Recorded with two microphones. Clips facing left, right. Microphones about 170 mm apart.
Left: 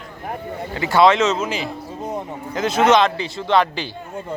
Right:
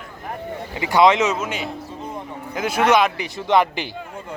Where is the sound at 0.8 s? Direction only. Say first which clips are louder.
Left 1 dB; 15° right (ahead or behind).